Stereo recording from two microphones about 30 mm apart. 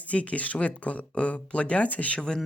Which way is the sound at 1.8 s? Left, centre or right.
Left.